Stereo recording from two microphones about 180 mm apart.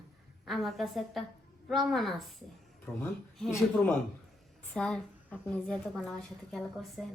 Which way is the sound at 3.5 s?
10° left (ahead or behind).